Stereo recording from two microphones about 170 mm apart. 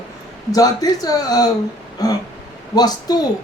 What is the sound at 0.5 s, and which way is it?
Speech, 20° left (ahead or behind).